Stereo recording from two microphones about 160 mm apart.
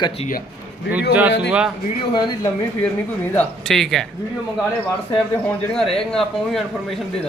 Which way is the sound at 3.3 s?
5° left (ahead or behind).